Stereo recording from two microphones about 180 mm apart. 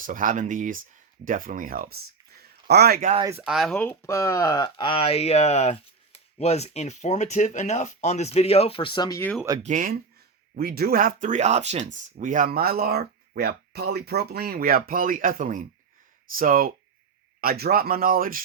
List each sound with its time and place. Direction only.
0.0 s speech: 50° right (ahead or behind)
2.4 s a sound: 65° right (ahead or behind)
3.3 s speech: 5° right (ahead or behind); by 9.3 s 15° left (ahead or behind)
9.6 s speech: 50° right (ahead or behind)